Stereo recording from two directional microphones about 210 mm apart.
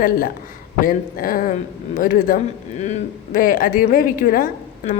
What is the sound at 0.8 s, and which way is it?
A man's voice, 40° left (ahead or behind).